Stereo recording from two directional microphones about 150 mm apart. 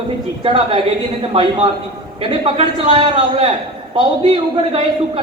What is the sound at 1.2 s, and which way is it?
A man's voice, 40° right (ahead or behind).